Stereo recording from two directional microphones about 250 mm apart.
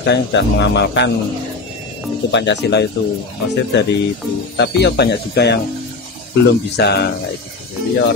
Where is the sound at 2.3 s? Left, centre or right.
Left.